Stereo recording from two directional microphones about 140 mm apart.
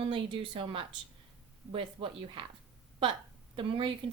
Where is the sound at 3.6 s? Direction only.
35° right (ahead or behind).